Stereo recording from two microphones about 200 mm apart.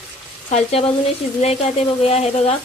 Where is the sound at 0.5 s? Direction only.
30° left (ahead or behind).